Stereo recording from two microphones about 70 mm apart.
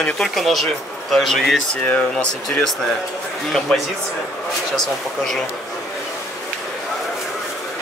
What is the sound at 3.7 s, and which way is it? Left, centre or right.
Speech, centre.